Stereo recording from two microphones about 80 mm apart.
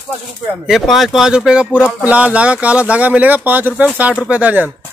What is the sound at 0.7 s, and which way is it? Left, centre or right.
Speech, centre.